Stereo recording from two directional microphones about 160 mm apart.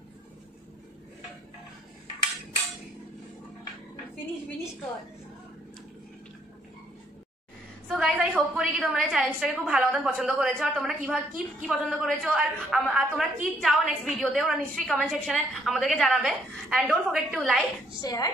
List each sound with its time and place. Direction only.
7.9 s a woman's voice: centre (ahead or behind)
18.0 s a woman's voice: 20° left (ahead or behind)